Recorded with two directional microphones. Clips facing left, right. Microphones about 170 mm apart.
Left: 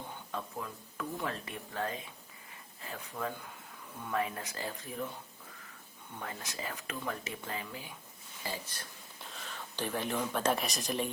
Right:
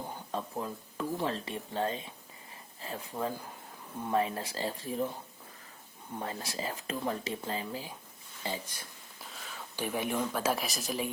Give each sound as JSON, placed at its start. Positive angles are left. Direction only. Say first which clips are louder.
{"t": 0.3, "sound": "speech", "louder": "right 4 dB", "side_deg": -30}
{"t": 6.1, "sound": "speech", "louder": "right 5 dB", "side_deg": -30}
{"t": 8.6, "sound": "speech", "louder": "even", "side_deg": -10}